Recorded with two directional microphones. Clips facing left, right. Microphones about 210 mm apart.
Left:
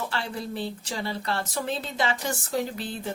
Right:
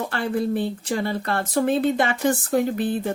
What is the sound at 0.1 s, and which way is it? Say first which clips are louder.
Speech: right 9 dB; 55° right (ahead or behind).